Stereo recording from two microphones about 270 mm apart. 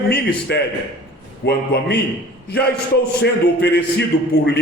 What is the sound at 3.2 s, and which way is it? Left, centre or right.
Speech, left.